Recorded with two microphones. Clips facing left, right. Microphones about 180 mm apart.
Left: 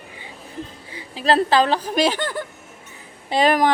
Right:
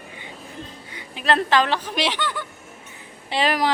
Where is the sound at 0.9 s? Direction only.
30° left (ahead or behind).